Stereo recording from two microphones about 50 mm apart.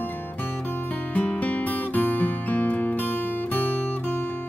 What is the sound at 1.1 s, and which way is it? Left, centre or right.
Music, left.